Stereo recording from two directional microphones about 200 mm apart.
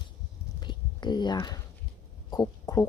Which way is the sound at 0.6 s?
20° left (ahead or behind).